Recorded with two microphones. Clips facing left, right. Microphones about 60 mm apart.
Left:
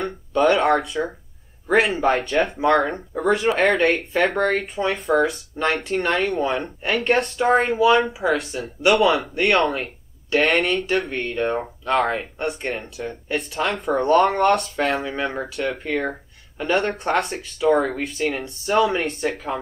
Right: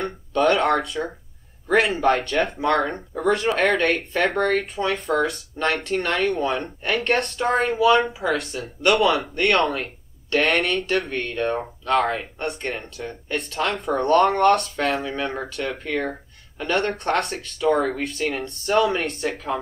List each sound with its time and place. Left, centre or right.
0.4 s speech: centre